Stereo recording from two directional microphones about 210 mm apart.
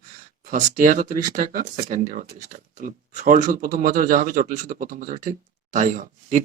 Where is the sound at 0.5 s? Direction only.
40° right (ahead or behind).